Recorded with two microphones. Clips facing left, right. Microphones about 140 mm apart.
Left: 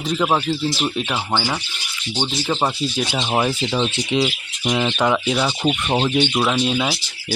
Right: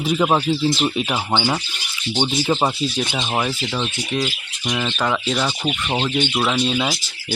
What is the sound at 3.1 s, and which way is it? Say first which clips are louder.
Speech: left 2 dB; 10° left (ahead or behind).